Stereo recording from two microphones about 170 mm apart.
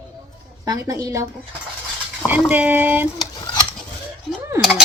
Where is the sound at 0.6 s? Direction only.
20° right (ahead or behind).